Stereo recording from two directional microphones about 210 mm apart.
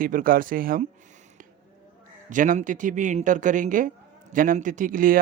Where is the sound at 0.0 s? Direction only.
40° right (ahead or behind).